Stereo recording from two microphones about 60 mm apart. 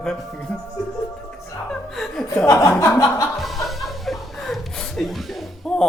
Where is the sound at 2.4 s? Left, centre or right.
Left.